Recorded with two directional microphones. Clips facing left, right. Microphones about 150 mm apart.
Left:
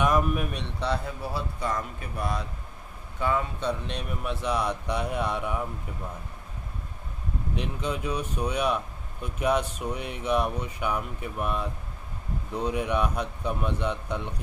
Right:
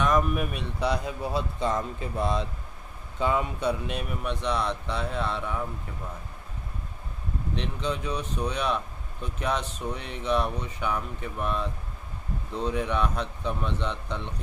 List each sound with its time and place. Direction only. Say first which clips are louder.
0.0 s speech: even; 5° left (ahead or behind)
7.5 s speech: even; 10° left (ahead or behind)